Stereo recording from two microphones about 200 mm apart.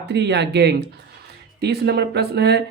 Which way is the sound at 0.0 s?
60° right (ahead or behind).